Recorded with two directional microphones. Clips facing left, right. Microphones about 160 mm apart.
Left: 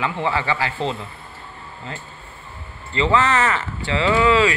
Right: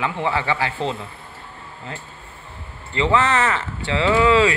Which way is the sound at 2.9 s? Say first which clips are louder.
Even; 20° right (ahead or behind).